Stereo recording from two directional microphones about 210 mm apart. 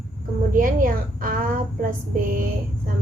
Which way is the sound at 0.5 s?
40° right (ahead or behind).